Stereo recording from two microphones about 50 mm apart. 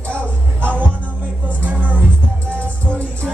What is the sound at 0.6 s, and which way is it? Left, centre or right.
Music, right.